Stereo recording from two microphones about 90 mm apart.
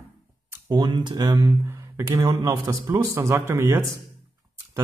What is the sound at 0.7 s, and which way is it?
Speech, 45° right (ahead or behind).